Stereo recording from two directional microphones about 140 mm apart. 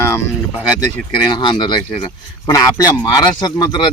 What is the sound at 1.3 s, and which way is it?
Speech, 35° left (ahead or behind).